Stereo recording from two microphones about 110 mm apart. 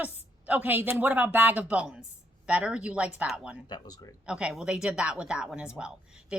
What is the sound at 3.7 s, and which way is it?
Speech, 35° left (ahead or behind).